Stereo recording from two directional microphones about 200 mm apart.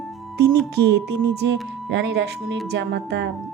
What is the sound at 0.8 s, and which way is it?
Speech, 55° right (ahead or behind).